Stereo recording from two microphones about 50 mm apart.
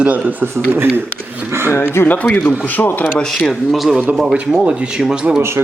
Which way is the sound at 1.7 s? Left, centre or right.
Left.